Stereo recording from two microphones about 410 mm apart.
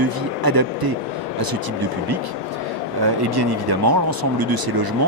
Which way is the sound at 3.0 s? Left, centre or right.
Right.